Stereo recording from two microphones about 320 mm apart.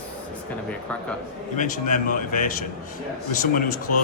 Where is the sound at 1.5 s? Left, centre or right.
Left.